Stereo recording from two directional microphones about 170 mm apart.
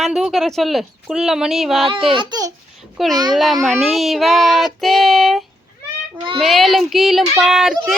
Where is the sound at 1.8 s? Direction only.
30° right (ahead or behind).